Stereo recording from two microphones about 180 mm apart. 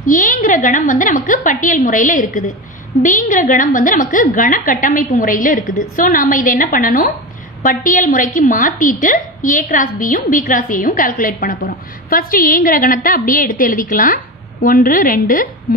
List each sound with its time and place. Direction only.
0.0 s a woman's voice: 50° left (ahead or behind)